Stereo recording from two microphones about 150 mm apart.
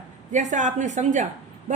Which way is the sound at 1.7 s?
55° right (ahead or behind).